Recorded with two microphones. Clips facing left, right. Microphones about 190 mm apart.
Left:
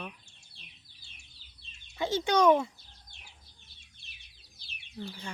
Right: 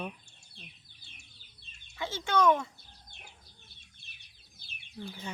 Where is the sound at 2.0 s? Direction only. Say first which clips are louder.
Left 3 dB; 15° left (ahead or behind).